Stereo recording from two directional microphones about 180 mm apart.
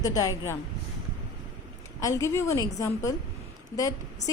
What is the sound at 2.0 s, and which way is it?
A woman's voice, 15° left (ahead or behind).